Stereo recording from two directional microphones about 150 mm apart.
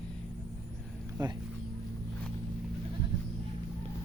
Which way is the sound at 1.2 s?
30° right (ahead or behind).